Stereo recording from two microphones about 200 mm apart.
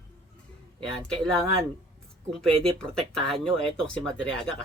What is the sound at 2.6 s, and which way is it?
Speech, 5° left (ahead or behind).